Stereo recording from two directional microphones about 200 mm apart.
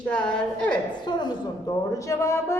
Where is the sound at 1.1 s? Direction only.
20° left (ahead or behind).